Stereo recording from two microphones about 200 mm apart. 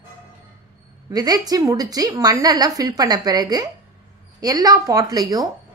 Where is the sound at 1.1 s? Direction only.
20° right (ahead or behind).